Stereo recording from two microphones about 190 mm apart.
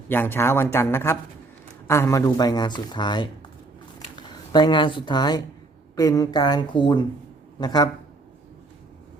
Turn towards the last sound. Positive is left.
turn(degrees=20)  # may be behind; listen again after turning